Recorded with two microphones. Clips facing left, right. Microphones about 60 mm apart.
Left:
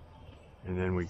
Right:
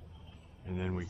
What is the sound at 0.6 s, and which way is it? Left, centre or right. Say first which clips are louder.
Speech: left 5 dB; left.